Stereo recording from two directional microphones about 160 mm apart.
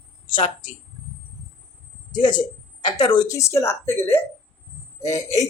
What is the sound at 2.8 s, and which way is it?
Speech, 25° left (ahead or behind).